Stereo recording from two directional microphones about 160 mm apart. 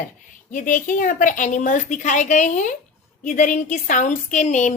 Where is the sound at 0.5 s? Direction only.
55° left (ahead or behind).